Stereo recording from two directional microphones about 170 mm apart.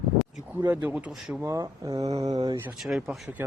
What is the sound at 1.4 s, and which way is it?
Speech, 20° right (ahead or behind).